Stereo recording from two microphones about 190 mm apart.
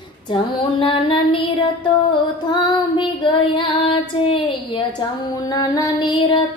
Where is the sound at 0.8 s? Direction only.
25° left (ahead or behind).